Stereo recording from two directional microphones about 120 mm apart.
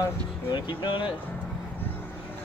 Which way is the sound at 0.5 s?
40° left (ahead or behind).